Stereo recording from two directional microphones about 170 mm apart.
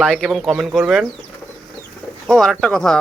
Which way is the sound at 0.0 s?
Centre (ahead or behind).